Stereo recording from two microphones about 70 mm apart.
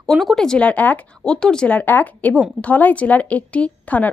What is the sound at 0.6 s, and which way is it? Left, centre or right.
Speech, left.